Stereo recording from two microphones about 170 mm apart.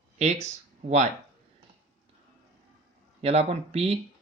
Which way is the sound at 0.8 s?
45° right (ahead or behind).